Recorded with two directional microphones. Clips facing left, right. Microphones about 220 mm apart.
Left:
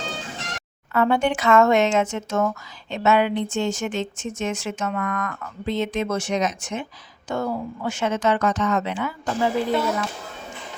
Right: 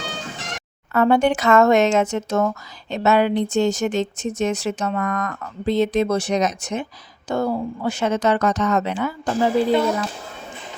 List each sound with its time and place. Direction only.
0.9 s speech: 40° right (ahead or behind)